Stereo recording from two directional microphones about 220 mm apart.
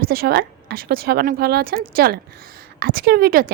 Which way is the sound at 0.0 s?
40° right (ahead or behind).